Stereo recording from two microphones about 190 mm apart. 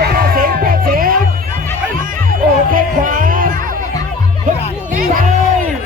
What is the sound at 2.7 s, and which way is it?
Music, 45° right (ahead or behind).